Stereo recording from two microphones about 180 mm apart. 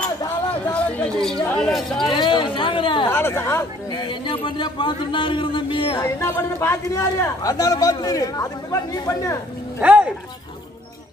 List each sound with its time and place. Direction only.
0.7 s a sound: 5° left (ahead or behind)
1.5 s speech: centre (ahead or behind)
2.0 s a man's voice: 25° left (ahead or behind)
3.1 s speech: 15° left (ahead or behind)
3.9 s a man's voice: 25° left (ahead or behind)
6.0 s a man's voice: 15° left (ahead or behind)
9.8 s a sound: 10° right (ahead or behind)